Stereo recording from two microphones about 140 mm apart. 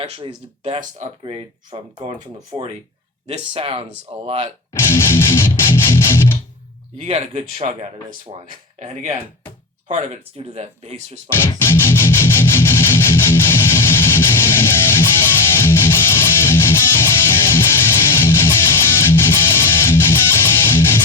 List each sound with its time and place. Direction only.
0.0 s speech: 50° right (ahead or behind)
1.2 s speech: 40° right (ahead or behind)
3.2 s speech: 45° right (ahead or behind)
4.7 s music: 15° left (ahead or behind)
7.0 s speech: 50° right (ahead or behind)
8.8 s speech: 65° right (ahead or behind)
9.9 s speech: 45° right (ahead or behind)
11.4 s music: 15° left (ahead or behind)